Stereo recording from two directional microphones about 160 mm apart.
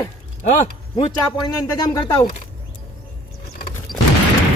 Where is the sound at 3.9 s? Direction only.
Centre (ahead or behind).